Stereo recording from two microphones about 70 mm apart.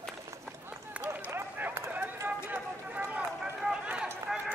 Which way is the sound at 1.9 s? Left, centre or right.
Right.